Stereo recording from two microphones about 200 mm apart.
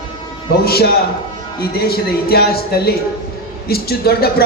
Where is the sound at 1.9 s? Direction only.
50° left (ahead or behind).